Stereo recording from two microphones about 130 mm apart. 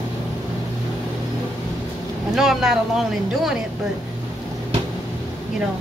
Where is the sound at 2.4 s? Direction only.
5° right (ahead or behind).